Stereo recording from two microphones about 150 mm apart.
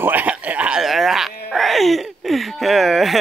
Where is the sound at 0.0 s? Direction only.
10° right (ahead or behind).